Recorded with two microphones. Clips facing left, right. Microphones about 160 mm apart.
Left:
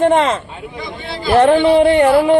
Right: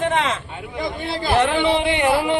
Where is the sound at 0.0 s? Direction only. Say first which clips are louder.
Left 8 dB; 60° left (ahead or behind).